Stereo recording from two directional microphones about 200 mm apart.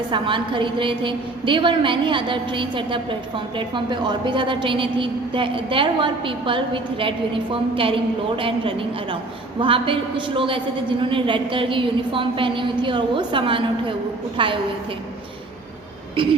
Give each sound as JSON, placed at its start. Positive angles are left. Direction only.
{"t": 0.1, "sound": "a woman's voice", "side_deg": -25}